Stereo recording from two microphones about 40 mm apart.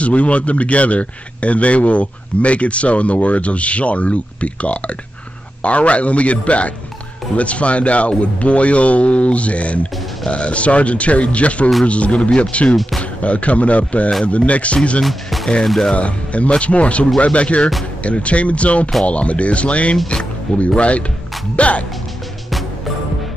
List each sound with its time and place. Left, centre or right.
0.0 s speech: left
15.0 s speech: centre
15.9 s speech: left
21.5 s music: left